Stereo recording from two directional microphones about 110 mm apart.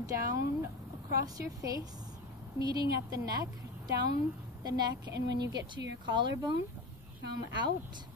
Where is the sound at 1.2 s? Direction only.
30° right (ahead or behind).